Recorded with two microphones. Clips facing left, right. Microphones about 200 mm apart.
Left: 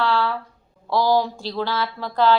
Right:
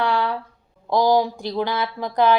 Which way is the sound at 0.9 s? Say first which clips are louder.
Right 2 dB; 15° right (ahead or behind).